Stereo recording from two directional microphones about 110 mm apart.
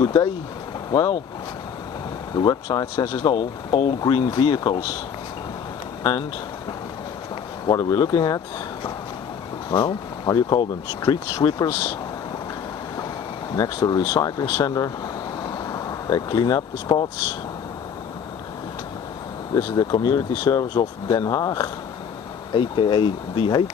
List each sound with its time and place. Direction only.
0.0 s speech: 40° left (ahead or behind)
2.3 s speech: 40° left (ahead or behind)
6.0 s speech: 40° left (ahead or behind)
7.6 s speech: 40° left (ahead or behind)
9.7 s speech: 40° left (ahead or behind)
13.6 s speech: 35° left (ahead or behind)
15.4 s vehicle: 35° left (ahead or behind)
19.5 s speech: 35° left (ahead or behind)
22.5 s speech: 50° left (ahead or behind)